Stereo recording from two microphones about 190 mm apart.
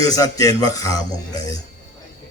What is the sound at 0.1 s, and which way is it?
A man's voice, 20° left (ahead or behind).